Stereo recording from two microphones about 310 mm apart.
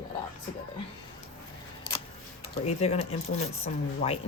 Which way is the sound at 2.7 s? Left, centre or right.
Centre.